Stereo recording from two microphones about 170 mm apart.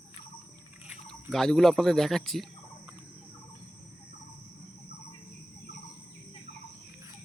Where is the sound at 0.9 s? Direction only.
Centre (ahead or behind).